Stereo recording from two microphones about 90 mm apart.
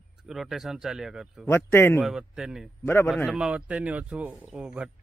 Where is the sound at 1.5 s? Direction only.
25° left (ahead or behind).